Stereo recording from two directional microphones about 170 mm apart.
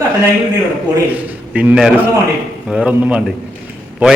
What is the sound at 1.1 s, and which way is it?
A man's voice, 10° right (ahead or behind).